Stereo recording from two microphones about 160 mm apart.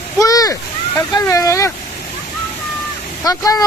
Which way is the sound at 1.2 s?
20° left (ahead or behind).